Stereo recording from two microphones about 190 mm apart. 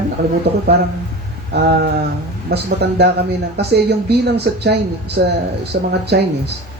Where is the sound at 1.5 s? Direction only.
60° right (ahead or behind).